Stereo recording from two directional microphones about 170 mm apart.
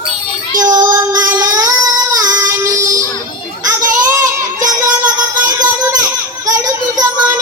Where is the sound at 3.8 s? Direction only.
15° right (ahead or behind).